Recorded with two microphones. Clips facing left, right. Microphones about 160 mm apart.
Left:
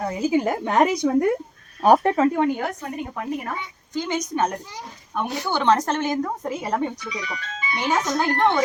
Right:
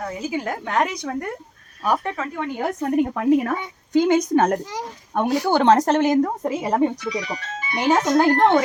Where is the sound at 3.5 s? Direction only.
55° right (ahead or behind).